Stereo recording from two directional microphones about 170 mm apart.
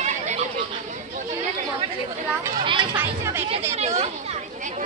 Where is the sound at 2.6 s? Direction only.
30° right (ahead or behind).